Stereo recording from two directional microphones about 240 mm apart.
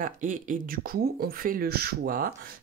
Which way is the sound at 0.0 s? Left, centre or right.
Right.